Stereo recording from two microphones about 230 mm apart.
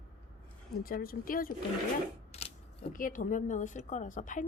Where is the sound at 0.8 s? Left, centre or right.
Left.